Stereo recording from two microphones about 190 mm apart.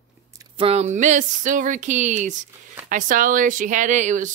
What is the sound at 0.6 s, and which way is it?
Speech, 35° right (ahead or behind).